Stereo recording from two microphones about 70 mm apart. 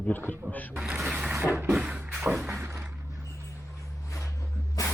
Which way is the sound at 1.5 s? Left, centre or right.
Right.